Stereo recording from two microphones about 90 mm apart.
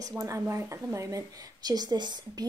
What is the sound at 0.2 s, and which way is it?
A woman's voice, 35° right (ahead or behind).